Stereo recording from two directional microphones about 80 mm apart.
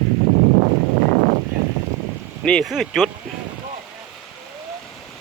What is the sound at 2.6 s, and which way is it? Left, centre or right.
Speech, centre.